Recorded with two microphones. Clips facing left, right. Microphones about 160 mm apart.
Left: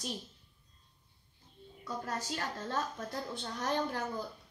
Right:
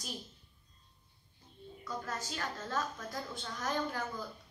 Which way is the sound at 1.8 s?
35° left (ahead or behind).